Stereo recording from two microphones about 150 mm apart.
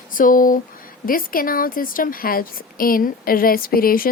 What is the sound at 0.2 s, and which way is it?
A woman's voice, 65° left (ahead or behind).